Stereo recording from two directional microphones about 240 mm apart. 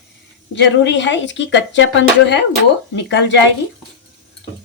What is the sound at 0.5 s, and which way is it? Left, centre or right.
Speech, left.